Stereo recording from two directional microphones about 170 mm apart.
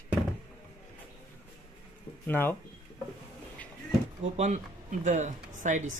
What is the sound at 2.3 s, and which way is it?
Speech, 10° left (ahead or behind).